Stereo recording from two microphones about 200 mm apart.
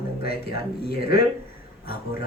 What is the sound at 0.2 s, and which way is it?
A man's voice, 50° left (ahead or behind).